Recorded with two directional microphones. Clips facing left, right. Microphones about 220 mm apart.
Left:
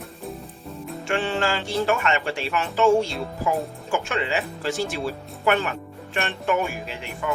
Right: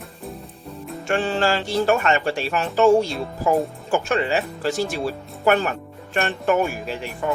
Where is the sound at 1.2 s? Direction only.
35° right (ahead or behind).